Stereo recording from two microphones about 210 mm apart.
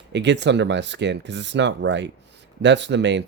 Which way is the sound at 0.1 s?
55° right (ahead or behind).